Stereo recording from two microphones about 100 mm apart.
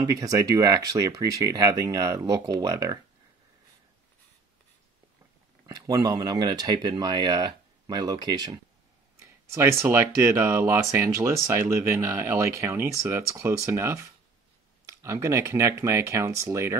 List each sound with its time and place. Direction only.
0.0 s speech: 35° right (ahead or behind)
5.7 s speech: 40° right (ahead or behind)
9.2 s speech: 25° right (ahead or behind)